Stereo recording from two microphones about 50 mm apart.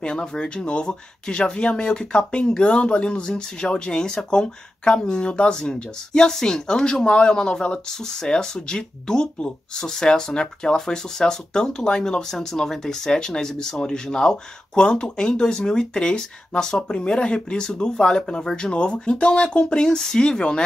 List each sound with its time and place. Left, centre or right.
0.0 s speech: centre